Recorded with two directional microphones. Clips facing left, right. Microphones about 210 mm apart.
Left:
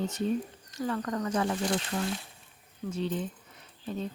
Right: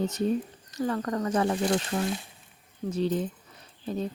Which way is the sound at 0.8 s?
45° right (ahead or behind).